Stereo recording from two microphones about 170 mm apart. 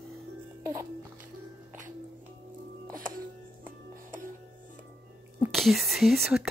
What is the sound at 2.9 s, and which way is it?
Music, 55° right (ahead or behind).